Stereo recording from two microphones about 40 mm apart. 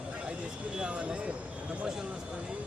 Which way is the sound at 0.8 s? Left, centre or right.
Right.